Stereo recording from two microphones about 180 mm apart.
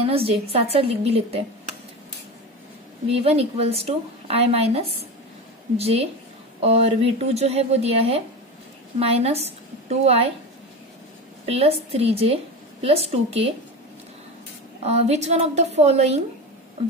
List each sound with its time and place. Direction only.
0.1 s a woman's voice: 35° right (ahead or behind)
3.1 s a woman's voice: 35° right (ahead or behind)
11.4 s a woman's voice: 35° right (ahead or behind)
14.8 s a woman's voice: 35° right (ahead or behind)